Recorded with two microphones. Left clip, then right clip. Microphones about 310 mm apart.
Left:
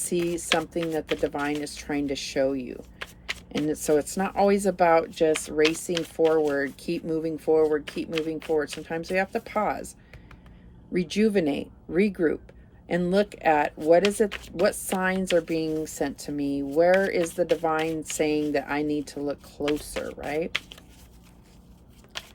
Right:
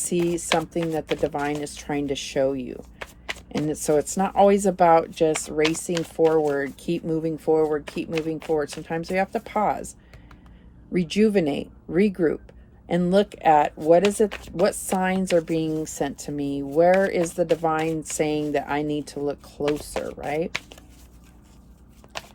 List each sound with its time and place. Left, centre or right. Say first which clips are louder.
0.0 s chopping: right 3 dB; right
0.9 s speech: right 2 dB; centre
10.9 s speech: right 3 dB; right
19.8 s chopping: right 3 dB; centre
20.2 s speech: right 2 dB; right